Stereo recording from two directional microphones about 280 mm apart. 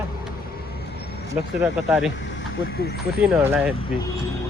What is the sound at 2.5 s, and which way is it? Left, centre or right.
Speech, left.